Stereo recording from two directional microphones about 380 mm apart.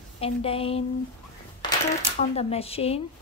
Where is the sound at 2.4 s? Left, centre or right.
Centre.